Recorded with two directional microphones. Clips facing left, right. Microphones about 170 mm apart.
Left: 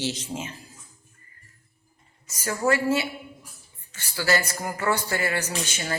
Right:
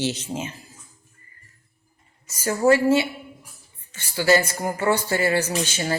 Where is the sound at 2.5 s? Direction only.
25° right (ahead or behind).